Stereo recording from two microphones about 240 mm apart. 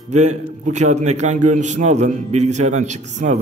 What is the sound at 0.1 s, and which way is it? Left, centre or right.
A man's voice, right.